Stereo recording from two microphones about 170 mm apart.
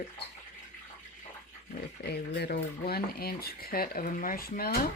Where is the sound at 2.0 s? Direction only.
75° left (ahead or behind).